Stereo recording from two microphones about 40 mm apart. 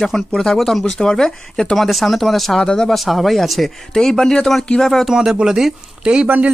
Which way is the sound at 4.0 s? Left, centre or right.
Centre.